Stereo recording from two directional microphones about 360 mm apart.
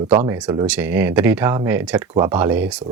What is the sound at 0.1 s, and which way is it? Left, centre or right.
Speech, centre.